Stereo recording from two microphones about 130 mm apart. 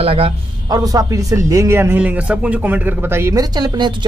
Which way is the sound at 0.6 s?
30° right (ahead or behind).